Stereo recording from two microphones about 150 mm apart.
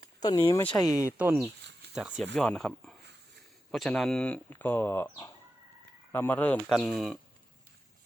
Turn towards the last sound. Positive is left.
turn(degrees=0)  # may be behind; listen again after turning